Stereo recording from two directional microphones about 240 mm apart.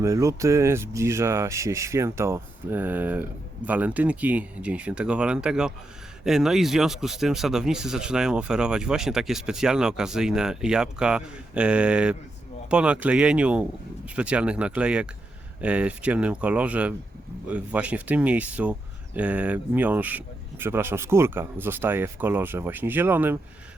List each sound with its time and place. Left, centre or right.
0.0 s speech: centre